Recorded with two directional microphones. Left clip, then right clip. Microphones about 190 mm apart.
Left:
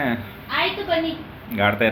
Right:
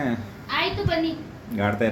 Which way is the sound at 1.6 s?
10° right (ahead or behind).